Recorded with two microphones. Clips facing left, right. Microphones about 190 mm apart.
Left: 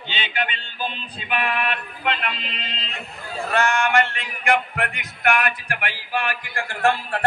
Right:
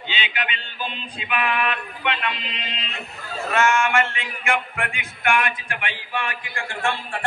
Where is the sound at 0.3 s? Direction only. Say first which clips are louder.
Left 3 dB; 30° left (ahead or behind).